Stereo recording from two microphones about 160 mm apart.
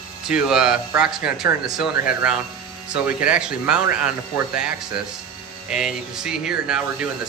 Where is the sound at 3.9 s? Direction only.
5° right (ahead or behind).